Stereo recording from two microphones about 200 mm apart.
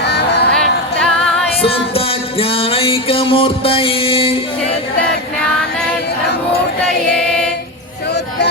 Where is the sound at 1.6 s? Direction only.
30° left (ahead or behind).